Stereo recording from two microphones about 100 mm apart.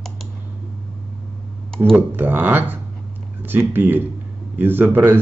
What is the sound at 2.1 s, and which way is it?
Speech, 20° right (ahead or behind).